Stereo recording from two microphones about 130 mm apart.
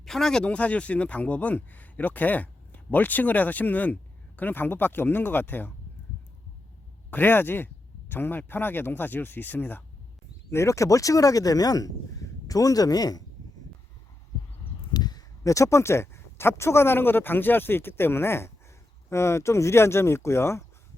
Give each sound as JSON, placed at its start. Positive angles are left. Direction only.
{"t": 0.0, "sound": "speech", "side_deg": 5}
{"t": 7.1, "sound": "speech", "side_deg": 15}
{"t": 14.9, "sound": "speech", "side_deg": 30}